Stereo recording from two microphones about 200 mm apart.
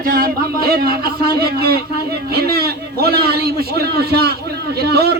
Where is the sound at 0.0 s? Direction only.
45° right (ahead or behind).